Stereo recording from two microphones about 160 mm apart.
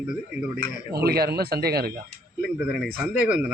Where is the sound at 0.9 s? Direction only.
80° right.